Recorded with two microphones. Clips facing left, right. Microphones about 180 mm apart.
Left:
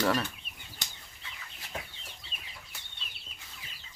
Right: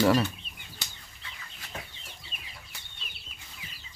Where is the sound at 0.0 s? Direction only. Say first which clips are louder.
Right 6 dB; 10° right (ahead or behind).